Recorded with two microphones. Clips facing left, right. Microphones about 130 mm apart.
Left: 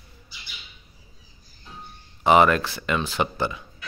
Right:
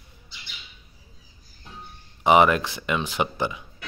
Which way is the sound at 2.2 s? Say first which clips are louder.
Even; 15° right (ahead or behind).